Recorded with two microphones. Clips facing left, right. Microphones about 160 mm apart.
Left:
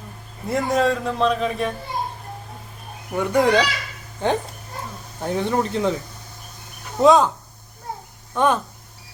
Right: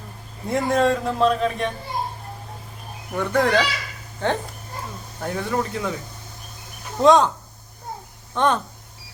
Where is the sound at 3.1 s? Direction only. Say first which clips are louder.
Left 2 dB; 10° left (ahead or behind).